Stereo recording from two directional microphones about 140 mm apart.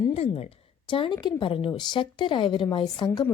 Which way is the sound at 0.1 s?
45° left (ahead or behind).